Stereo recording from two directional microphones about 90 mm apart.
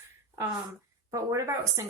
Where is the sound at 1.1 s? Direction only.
35° right (ahead or behind).